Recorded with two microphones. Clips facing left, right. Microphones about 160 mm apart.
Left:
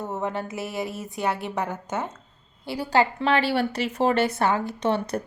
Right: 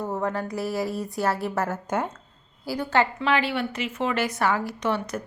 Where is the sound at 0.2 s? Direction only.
25° left (ahead or behind).